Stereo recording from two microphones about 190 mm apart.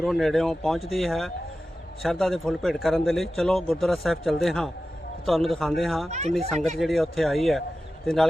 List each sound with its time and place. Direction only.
0.0 s a man's voice: centre (ahead or behind)
6.1 s speech: 35° right (ahead or behind)
6.7 s a man's voice: centre (ahead or behind)